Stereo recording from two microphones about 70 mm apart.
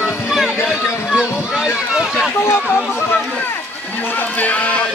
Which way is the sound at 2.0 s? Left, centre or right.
Centre.